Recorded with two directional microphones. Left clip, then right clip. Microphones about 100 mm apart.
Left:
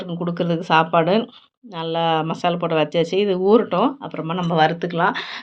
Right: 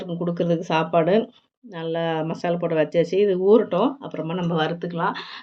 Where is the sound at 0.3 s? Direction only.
15° left (ahead or behind).